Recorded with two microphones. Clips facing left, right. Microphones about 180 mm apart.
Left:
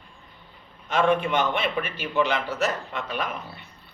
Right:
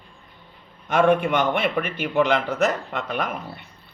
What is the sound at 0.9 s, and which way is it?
A man's voice, 55° right (ahead or behind).